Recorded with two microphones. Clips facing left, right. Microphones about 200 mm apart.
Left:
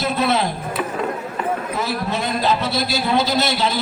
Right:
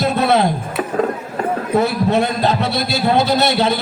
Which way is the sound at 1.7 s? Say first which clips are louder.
Right 8 dB; 60° right (ahead or behind).